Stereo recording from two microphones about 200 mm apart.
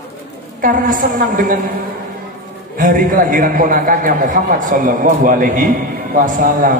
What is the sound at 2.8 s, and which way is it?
A man's voice, 40° right (ahead or behind).